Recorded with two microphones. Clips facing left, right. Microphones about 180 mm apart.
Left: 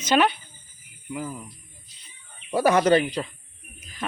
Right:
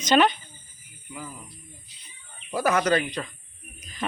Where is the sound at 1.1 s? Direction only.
50° left (ahead or behind).